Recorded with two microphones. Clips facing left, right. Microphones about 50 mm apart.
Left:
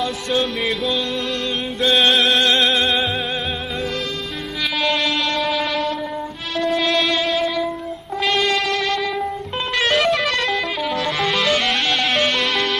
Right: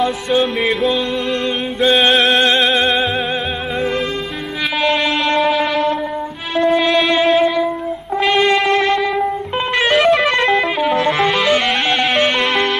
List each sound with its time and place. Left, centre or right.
0.0 s music: centre
2.3 s music: right
4.8 s a sound: centre
6.5 s music: centre
10.2 s music: right